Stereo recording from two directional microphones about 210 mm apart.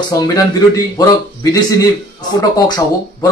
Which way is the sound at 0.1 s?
15° left (ahead or behind).